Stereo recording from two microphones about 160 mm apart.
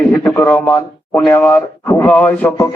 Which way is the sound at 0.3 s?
5° left (ahead or behind).